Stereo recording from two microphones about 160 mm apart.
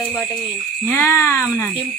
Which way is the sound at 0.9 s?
15° left (ahead or behind).